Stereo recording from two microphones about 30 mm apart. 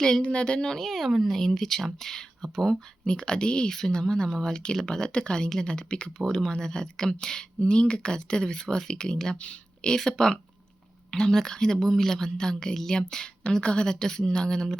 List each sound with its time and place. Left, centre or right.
0.2 s speech: left
0.8 s speech: centre
1.3 s speech: centre
3.1 s speech: left
3.7 s speech: centre; by 6.1 s left
6.1 s speech: centre
9.1 s speech: centre
9.4 s a sound: left
9.9 s speech: left